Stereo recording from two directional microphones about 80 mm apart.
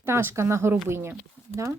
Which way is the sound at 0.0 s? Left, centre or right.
Right.